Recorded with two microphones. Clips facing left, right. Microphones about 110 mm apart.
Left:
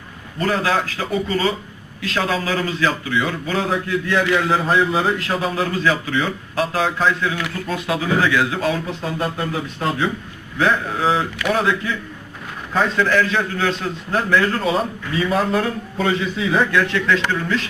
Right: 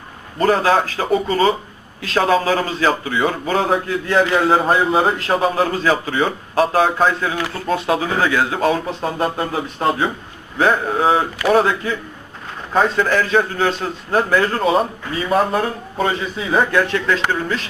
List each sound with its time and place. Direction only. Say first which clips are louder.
0.3 s a man's voice: right 5 dB; 35° right (ahead or behind)